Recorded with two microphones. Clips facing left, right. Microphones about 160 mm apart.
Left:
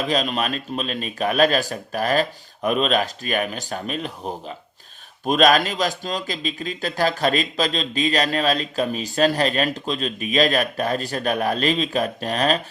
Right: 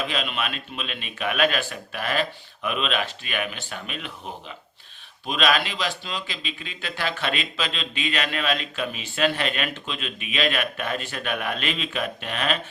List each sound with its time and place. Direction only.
0.0 s a man's voice: 40° left (ahead or behind)